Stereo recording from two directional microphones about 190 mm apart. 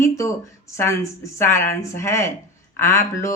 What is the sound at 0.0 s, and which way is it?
A woman's voice, 15° left (ahead or behind).